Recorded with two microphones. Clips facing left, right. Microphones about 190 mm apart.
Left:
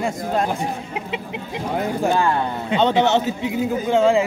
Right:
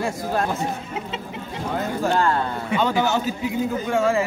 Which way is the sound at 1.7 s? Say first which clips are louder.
Left 2 dB; 15° left (ahead or behind).